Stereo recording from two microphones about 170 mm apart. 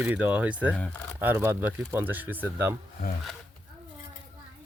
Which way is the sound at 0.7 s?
5° left (ahead or behind).